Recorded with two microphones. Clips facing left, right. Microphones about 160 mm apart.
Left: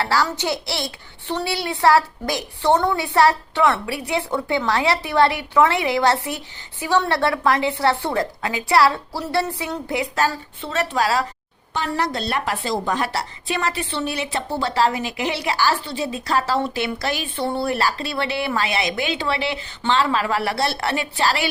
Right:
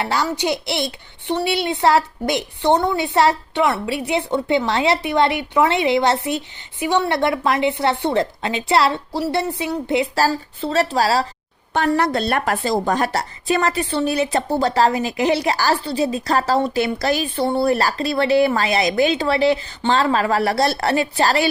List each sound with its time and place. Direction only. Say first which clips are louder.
0.0 s a child's voice: right 1 dB; 20° right (ahead or behind); by 11.3 s 35° right (ahead or behind)
11.7 s a woman's voice: right 6 dB; 55° right (ahead or behind); by 21.5 s 40° right (ahead or behind)